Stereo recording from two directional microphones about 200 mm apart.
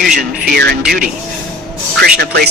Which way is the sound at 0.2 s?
50° right (ahead or behind).